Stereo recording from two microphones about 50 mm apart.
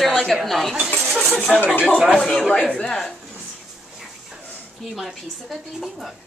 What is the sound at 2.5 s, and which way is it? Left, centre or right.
Speech, centre.